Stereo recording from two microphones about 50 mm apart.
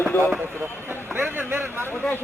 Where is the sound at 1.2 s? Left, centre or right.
Right.